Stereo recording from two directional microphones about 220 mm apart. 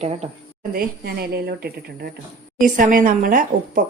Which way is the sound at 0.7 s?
45° right (ahead or behind).